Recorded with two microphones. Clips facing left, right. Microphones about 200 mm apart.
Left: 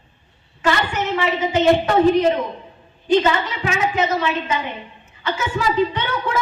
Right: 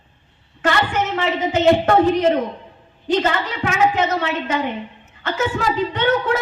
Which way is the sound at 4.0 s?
55° right (ahead or behind).